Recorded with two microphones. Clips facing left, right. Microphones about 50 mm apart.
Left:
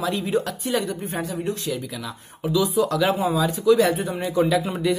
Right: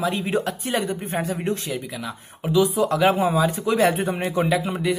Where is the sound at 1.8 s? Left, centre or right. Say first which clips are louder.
Right 1 dB; right.